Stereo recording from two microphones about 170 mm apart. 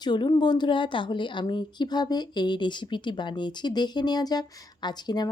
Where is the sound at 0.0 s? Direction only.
25° left (ahead or behind).